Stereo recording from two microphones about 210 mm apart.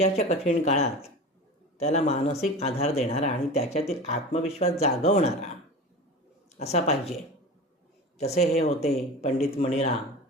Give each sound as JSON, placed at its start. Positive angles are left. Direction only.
{"t": 0.0, "sound": "speech", "side_deg": 30}
{"t": 6.6, "sound": "speech", "side_deg": 30}
{"t": 8.2, "sound": "speech", "side_deg": 30}